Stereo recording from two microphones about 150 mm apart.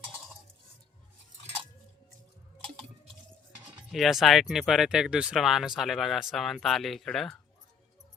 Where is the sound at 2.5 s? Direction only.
35° right (ahead or behind).